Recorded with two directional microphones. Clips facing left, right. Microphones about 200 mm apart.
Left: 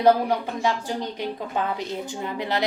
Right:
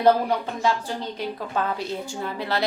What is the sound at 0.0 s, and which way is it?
Speech, 10° left (ahead or behind).